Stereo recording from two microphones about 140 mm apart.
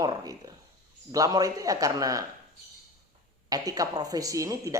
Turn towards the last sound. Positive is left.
turn(degrees=-25)  # may be behind; listen again after turning